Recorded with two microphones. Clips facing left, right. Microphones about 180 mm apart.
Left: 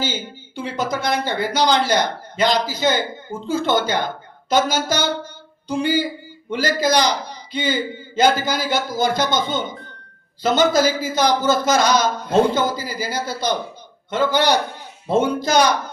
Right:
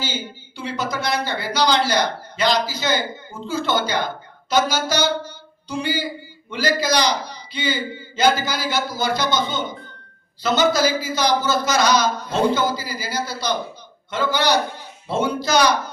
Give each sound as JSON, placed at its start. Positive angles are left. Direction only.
{"t": 0.5, "sound": "a man's voice", "side_deg": 50}